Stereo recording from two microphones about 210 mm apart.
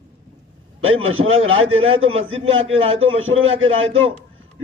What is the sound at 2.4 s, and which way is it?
Speech, 70° right (ahead or behind).